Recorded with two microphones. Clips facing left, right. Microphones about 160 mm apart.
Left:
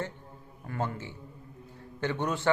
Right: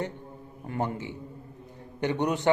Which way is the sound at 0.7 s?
20° right (ahead or behind).